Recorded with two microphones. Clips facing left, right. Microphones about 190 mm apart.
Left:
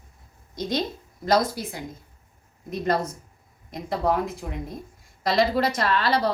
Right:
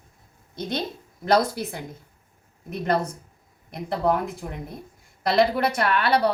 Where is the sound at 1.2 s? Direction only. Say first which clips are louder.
Right 1 dB; 60° right (ahead or behind).